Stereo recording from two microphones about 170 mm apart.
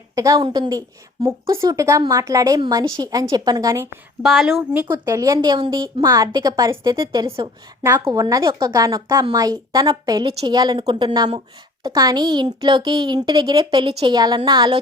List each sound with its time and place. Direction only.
0.2 s a woman's voice: 20° right (ahead or behind)
4.2 s speech: centre (ahead or behind)
4.9 s a woman's voice: 20° right (ahead or behind)